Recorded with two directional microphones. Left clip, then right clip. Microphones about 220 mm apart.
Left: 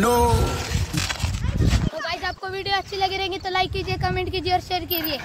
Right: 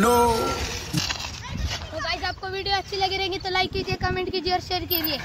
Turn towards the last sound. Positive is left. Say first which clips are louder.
# left 2 dB
turn(degrees=25)  # may be behind; listen again after turning